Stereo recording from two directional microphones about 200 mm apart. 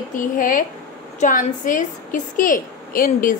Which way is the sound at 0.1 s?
40° left (ahead or behind).